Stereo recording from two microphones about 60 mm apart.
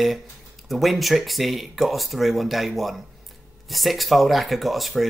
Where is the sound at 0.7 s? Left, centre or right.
Centre.